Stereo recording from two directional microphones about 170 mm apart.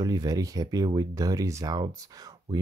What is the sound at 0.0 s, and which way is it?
Speech, 20° right (ahead or behind).